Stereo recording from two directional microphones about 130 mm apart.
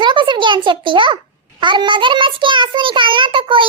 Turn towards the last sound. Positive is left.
turn(degrees=-40)  # may be behind; listen again after turning